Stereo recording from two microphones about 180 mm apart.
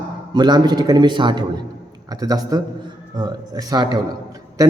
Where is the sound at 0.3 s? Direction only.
25° right (ahead or behind).